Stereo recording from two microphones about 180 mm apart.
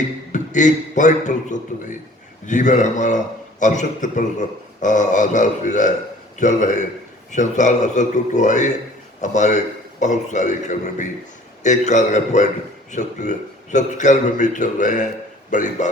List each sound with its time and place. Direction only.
0.3 s a man's voice: 45° left (ahead or behind)